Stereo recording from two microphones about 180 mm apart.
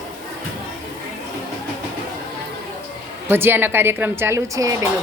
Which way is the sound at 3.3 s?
10° right (ahead or behind).